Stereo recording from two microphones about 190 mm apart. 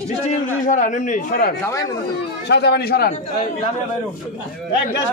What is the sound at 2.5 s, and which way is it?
Speech, 60° left (ahead or behind).